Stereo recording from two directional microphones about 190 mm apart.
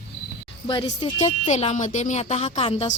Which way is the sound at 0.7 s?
25° left (ahead or behind).